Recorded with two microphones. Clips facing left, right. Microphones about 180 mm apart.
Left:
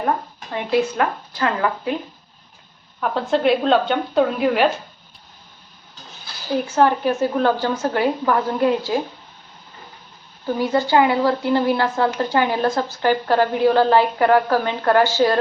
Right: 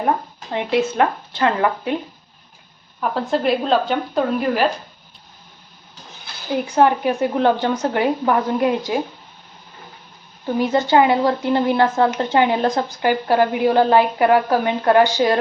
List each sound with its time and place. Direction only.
0.9 s speech: 25° right (ahead or behind)
3.0 s a woman's voice: centre (ahead or behind)
6.2 s a woman's voice: 15° right (ahead or behind)
10.4 s a woman's voice: 20° right (ahead or behind)